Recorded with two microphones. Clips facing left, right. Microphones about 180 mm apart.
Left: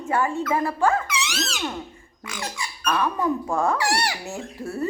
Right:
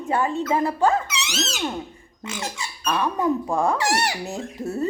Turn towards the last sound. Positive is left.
turn(degrees=-20)  # may be behind; listen again after turning